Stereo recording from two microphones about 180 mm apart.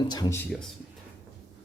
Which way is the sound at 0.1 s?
15° left (ahead or behind).